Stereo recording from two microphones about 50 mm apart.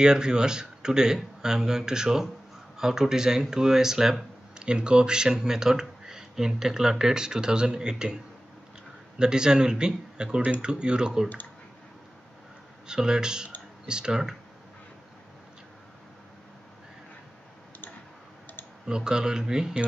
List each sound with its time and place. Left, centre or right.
0.0 s speech: centre
9.2 s speech: centre
12.8 s speech: centre
18.9 s speech: centre